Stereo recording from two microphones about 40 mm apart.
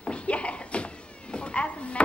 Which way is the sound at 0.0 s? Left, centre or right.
Left.